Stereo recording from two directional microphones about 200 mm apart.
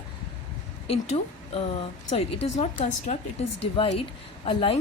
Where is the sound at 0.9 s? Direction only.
30° left (ahead or behind).